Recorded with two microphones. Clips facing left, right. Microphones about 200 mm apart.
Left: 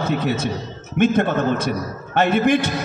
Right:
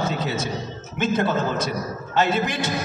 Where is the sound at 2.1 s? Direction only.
60° left (ahead or behind).